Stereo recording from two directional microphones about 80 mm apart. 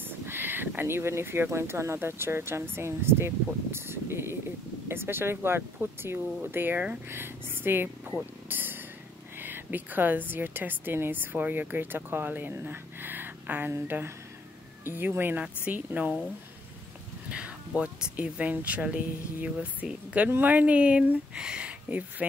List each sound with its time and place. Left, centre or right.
0.0 s a woman's voice: right
8.2 s a sound: right
9.4 s a woman's voice: right
17.3 s a woman's voice: centre